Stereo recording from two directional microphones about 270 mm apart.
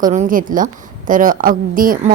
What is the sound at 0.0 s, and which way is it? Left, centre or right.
A woman's voice, right.